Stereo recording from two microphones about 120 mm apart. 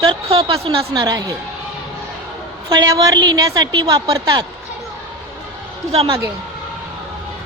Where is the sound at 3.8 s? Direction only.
45° right (ahead or behind).